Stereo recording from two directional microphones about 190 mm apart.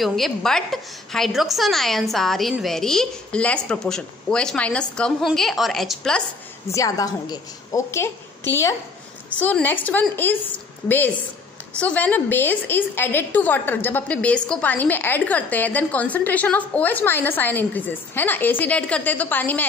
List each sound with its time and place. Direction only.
0.0 s a woman's voice: centre (ahead or behind)
6.7 s a woman's voice: 15° left (ahead or behind)
11.8 s a woman's voice: 10° left (ahead or behind)